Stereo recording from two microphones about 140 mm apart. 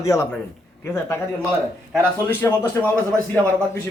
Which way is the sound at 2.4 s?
15° left (ahead or behind).